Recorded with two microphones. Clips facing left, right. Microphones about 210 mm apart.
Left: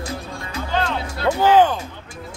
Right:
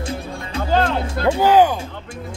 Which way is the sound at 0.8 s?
50° right (ahead or behind).